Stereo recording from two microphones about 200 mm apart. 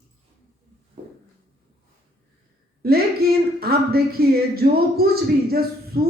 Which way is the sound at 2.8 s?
50° right (ahead or behind).